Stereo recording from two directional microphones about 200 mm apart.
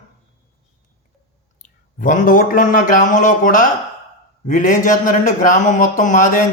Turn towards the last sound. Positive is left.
turn(degrees=40)  # may be behind; listen again after turning